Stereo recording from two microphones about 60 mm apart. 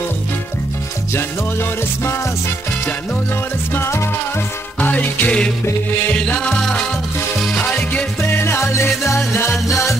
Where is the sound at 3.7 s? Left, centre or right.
Left.